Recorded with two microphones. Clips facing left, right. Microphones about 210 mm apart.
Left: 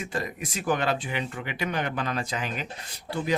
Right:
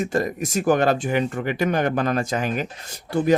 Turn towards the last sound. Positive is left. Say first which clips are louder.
# right 9 dB
turn(degrees=-45)  # may be behind; listen again after turning